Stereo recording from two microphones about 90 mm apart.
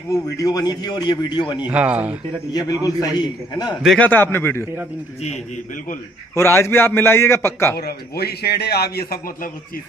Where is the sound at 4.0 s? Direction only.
20° left (ahead or behind).